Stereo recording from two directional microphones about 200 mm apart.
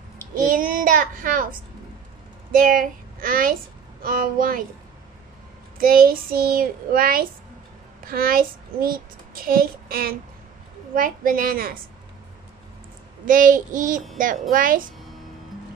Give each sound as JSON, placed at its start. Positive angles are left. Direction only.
{"t": 0.4, "sound": "a child's voice", "side_deg": -45}
{"t": 2.5, "sound": "child singing", "side_deg": -45}
{"t": 5.8, "sound": "child singing", "side_deg": -45}
{"t": 8.0, "sound": "a child's voice", "side_deg": -45}
{"t": 11.0, "sound": "child singing", "side_deg": -45}
{"t": 13.3, "sound": "child singing", "side_deg": -40}